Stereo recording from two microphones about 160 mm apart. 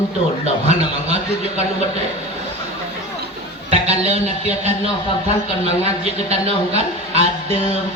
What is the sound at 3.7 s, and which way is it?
Speech, 40° right (ahead or behind).